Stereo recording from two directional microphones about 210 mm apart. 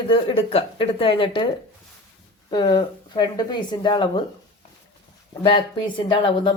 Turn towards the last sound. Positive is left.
turn(degrees=25)  # may be behind; listen again after turning